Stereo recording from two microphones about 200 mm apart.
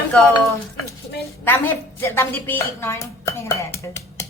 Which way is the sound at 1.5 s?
10° left (ahead or behind).